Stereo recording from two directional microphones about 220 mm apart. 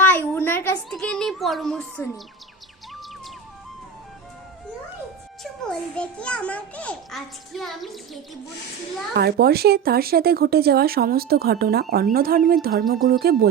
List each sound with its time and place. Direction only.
0.0 s a child's voice: 10° left (ahead or behind)
5.4 s a child's voice: 5° left (ahead or behind)
9.1 s speech: 45° right (ahead or behind)